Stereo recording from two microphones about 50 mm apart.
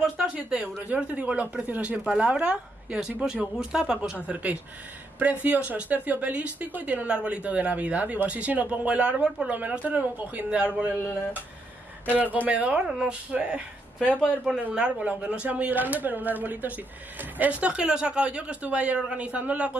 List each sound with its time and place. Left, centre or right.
0.8 s speech: right
4.3 s speech: right
12.8 s speech: centre
13.3 s speech: right